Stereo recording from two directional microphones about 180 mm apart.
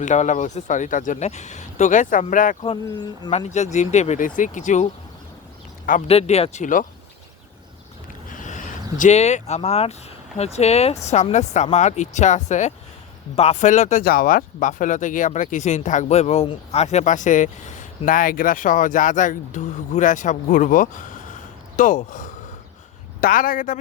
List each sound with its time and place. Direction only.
0.0 s speech: 45° left (ahead or behind)
2.8 s speech: 20° left (ahead or behind)
3.3 s speech: 40° left (ahead or behind)
6.1 s speech: 35° left (ahead or behind)
8.3 s vehicle: 45° left (ahead or behind)
10.3 s speech: 35° left (ahead or behind)